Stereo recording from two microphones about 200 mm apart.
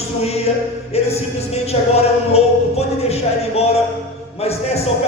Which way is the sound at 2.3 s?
30° left (ahead or behind).